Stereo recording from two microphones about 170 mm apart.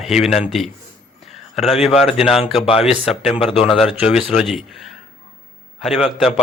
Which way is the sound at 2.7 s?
35° left (ahead or behind).